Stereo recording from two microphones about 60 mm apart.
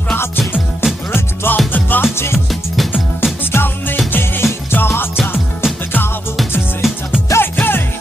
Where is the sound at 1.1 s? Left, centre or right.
Left.